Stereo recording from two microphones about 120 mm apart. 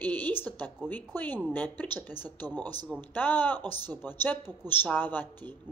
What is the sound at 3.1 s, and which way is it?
A woman's voice, 15° left (ahead or behind).